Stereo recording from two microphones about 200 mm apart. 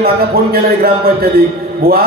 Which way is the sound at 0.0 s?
50° right (ahead or behind).